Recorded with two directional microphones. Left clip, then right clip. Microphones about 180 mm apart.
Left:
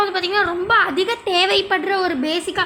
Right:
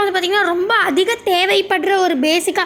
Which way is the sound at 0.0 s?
20° right (ahead or behind).